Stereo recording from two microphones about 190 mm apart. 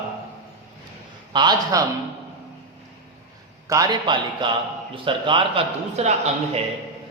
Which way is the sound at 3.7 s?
20° right (ahead or behind).